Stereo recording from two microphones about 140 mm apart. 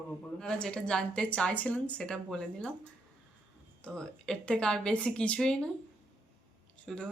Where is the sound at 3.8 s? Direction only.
5° left (ahead or behind).